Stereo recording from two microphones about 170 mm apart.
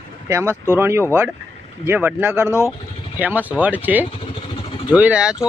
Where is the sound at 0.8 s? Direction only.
15° right (ahead or behind).